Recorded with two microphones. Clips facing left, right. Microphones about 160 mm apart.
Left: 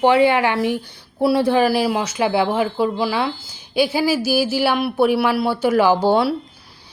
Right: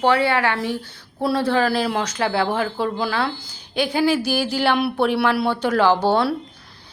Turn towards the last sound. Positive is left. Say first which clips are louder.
# left 2 dB
turn(degrees=10)  # may be behind; listen again after turning